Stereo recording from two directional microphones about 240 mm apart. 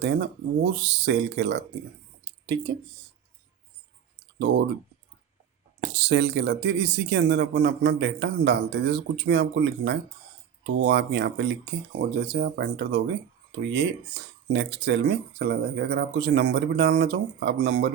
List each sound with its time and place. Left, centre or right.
0.0 s speech: right
4.4 s speech: right
5.8 s speech: right